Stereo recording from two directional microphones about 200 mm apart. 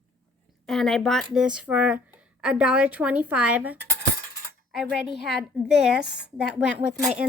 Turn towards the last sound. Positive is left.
turn(degrees=-5)  # may be behind; listen again after turning